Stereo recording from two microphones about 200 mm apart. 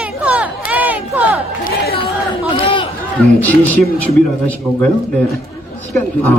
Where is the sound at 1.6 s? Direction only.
50° left (ahead or behind).